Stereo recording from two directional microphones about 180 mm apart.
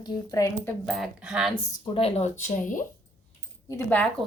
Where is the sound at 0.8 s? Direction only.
Centre (ahead or behind).